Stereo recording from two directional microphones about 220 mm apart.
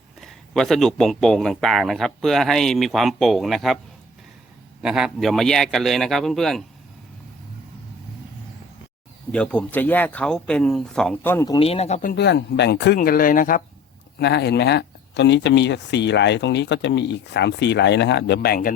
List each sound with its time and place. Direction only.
0.2 s a man's voice: centre (ahead or behind)
4.8 s a man's voice: 5° right (ahead or behind)
9.3 s a man's voice: 5° left (ahead or behind); by 12.1 s 30° left (ahead or behind)
12.1 s speech: 50° left (ahead or behind)